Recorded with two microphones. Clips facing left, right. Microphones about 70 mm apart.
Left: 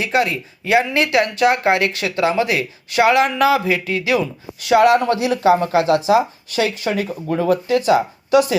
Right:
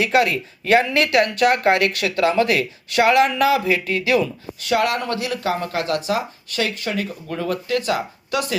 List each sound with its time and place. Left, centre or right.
0.0 s speech: centre; by 8.5 s left